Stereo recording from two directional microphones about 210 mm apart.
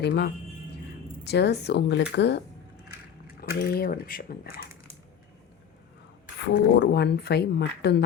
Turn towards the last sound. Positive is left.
turn(degrees=50)  # may be behind; listen again after turning